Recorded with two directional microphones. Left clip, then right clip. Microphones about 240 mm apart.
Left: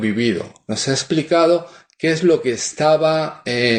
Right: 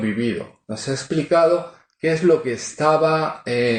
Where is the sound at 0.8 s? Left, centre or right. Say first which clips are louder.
Left 3 dB; left.